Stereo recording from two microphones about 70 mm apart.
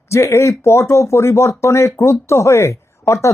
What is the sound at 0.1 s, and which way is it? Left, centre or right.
Speech, left.